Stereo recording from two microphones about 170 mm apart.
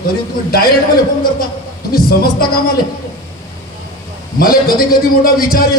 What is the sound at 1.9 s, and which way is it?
Speech, 60° left (ahead or behind).